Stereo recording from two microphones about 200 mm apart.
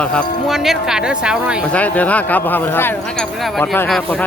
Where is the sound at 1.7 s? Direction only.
5° left (ahead or behind).